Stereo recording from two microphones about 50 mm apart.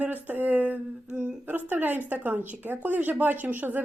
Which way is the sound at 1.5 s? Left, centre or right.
Right.